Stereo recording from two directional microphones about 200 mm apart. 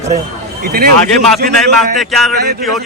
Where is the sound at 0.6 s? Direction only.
50° right (ahead or behind).